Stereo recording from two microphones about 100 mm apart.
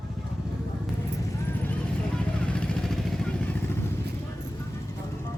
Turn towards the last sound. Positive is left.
turn(degrees=10)  # may be behind; listen again after turning